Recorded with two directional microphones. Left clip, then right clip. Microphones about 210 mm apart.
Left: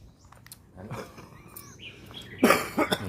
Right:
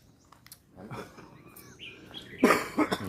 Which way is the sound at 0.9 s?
35° left (ahead or behind).